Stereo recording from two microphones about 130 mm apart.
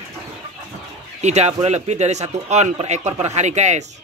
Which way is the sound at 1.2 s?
60° right (ahead or behind).